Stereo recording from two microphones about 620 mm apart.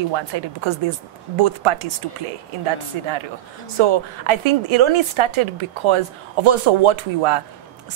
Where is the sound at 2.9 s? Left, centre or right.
Right.